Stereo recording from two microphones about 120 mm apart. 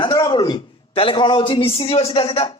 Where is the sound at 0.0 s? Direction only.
35° left (ahead or behind).